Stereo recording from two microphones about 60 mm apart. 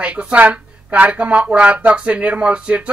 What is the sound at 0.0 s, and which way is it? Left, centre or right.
Speech, centre.